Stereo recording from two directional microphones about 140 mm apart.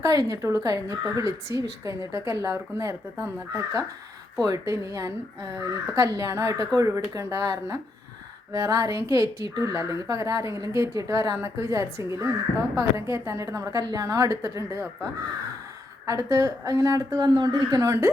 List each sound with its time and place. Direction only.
0.0 s speech: 25° right (ahead or behind)
16.0 s speech: 25° right (ahead or behind)